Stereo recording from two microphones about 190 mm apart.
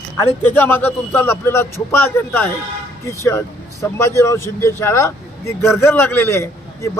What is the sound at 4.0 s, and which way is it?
Speech, 15° left (ahead or behind).